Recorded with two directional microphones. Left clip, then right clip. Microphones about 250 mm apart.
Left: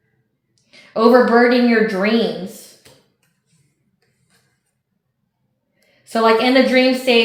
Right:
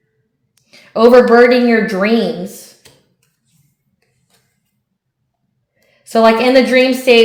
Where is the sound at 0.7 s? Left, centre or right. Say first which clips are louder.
Right 5 dB; right.